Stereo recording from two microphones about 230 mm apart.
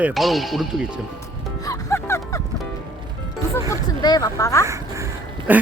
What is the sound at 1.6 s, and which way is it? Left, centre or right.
Music, centre.